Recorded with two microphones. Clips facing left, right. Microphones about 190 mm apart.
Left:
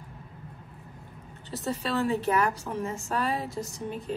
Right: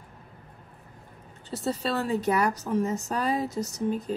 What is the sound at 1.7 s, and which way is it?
A woman's voice, 40° right (ahead or behind).